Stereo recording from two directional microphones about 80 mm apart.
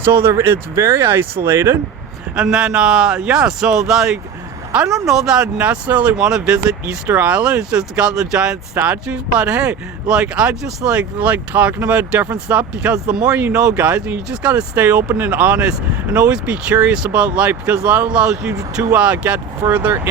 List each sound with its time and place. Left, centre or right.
0.0 s speech: right
2.3 s speech: centre
18.5 s speech: right
18.9 s speech: centre
19.6 s speech: right